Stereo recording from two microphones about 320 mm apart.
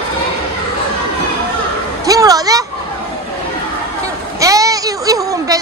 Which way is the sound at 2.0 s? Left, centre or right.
Centre.